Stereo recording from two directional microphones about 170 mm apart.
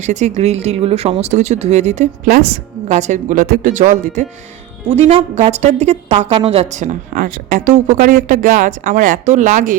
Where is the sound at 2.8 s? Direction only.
45° right (ahead or behind).